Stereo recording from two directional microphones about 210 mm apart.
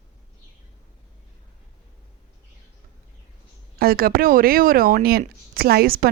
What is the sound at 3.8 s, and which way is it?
Speech, 45° right (ahead or behind).